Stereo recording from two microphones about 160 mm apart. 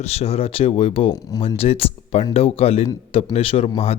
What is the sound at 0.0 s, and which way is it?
Speech, 40° left (ahead or behind).